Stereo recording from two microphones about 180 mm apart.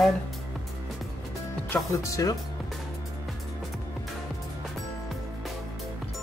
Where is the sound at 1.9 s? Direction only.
15° left (ahead or behind).